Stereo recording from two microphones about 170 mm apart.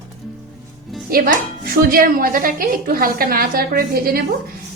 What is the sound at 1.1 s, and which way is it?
A woman's voice, 60° right (ahead or behind).